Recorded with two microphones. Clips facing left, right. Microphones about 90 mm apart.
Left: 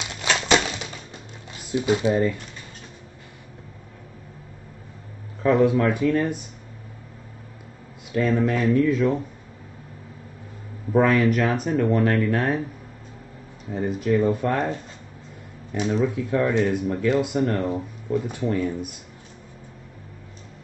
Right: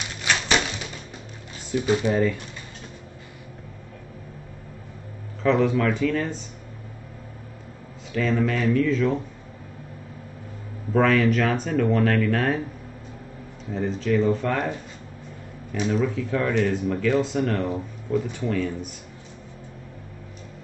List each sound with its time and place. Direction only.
1.7 s speech: 20° left (ahead or behind)
5.4 s speech: 15° left (ahead or behind)
8.1 s speech: 20° left (ahead or behind)
10.9 s speech: 15° left (ahead or behind)
13.7 s speech: 10° left (ahead or behind)
15.7 s speech: 20° left (ahead or behind)